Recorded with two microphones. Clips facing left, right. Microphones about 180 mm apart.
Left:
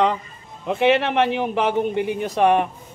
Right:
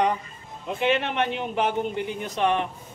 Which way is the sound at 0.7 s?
70° left (ahead or behind).